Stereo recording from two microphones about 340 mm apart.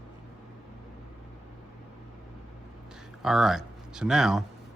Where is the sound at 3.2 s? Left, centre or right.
Centre.